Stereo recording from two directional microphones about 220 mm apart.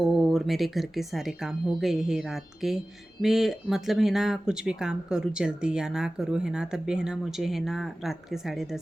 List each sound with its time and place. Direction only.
0.0 s speech: centre (ahead or behind)